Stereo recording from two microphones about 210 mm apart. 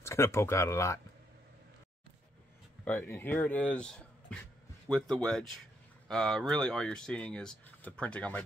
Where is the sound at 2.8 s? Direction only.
10° left (ahead or behind).